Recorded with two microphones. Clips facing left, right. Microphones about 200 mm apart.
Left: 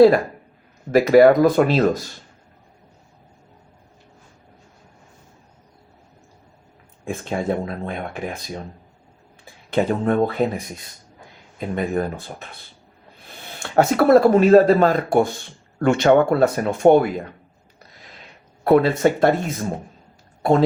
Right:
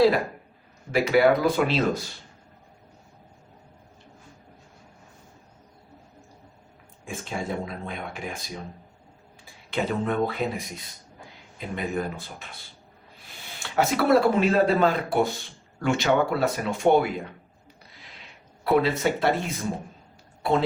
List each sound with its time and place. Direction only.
0.9 s speech: 45° left (ahead or behind)
7.1 s speech: 55° left (ahead or behind)
9.7 s speech: 50° left (ahead or behind)
11.7 s speech: 50° left (ahead or behind)
15.8 s speech: 55° left (ahead or behind)
18.6 s speech: 50° left (ahead or behind)